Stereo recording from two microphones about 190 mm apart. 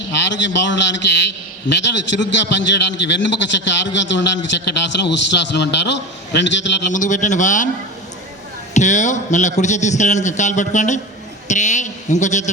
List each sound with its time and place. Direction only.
0.1 s a man's voice: 70° left (ahead or behind)
6.9 s a man's voice: 40° left (ahead or behind)
8.7 s a man's voice: 40° left (ahead or behind)